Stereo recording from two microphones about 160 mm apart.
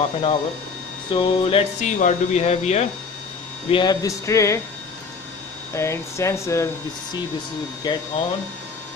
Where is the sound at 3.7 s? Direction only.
25° left (ahead or behind).